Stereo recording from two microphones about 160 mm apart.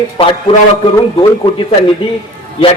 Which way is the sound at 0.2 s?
30° left (ahead or behind).